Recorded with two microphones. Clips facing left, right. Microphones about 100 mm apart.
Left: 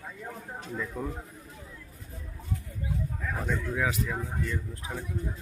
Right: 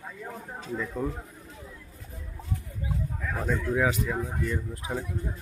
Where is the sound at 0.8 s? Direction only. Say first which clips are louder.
Right 4 dB; 5° right (ahead or behind).